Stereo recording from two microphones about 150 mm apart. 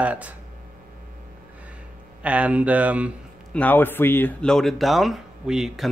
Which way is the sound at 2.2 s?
10° right (ahead or behind).